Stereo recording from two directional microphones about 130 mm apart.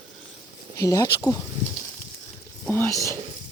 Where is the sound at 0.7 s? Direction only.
25° left (ahead or behind).